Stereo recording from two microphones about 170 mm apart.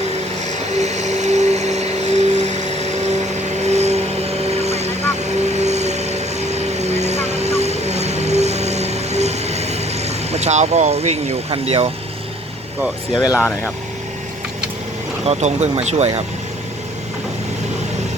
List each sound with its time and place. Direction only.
0.6 s vehicle: 40° right (ahead or behind)
13.2 s speech: 5° right (ahead or behind)
15.3 s speech: 40° right (ahead or behind)